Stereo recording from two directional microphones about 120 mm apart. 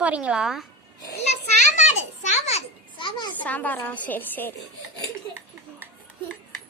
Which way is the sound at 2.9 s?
40° left (ahead or behind).